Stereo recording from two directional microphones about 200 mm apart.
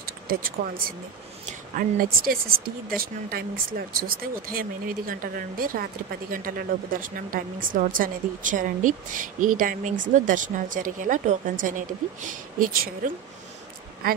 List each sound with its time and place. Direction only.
0.3 s a woman's voice: 45° right (ahead or behind)